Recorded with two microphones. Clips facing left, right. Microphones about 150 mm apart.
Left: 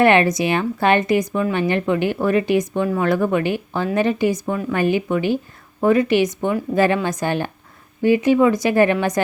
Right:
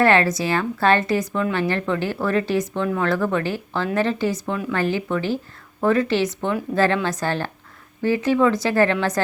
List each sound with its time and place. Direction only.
0.0 s speech: 20° left (ahead or behind)